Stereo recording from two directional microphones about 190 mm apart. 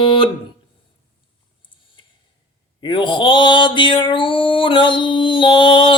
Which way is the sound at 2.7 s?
25° left (ahead or behind).